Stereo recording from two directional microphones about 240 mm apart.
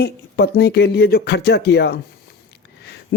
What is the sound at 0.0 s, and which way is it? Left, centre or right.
A man's voice, left.